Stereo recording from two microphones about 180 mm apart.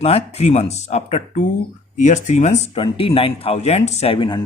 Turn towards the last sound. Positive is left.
turn(degrees=30)  # may be behind; listen again after turning